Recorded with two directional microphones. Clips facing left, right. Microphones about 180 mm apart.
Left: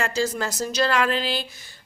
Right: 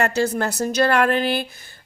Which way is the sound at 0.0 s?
60° right (ahead or behind).